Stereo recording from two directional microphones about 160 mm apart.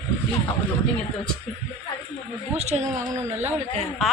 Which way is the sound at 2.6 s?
45° right (ahead or behind).